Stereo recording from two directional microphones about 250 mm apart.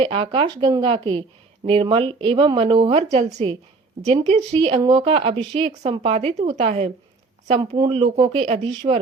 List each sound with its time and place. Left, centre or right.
0.0 s speech: right